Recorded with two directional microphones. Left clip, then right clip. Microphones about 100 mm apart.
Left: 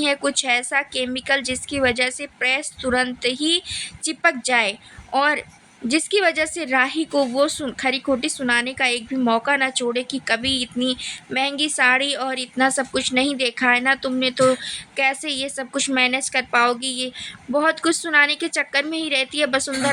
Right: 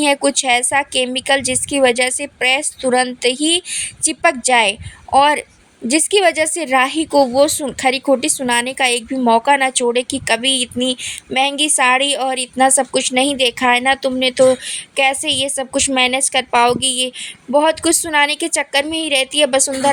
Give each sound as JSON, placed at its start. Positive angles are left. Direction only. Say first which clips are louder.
{"t": 0.0, "sound": "speech", "louder": "right 6 dB", "side_deg": -50}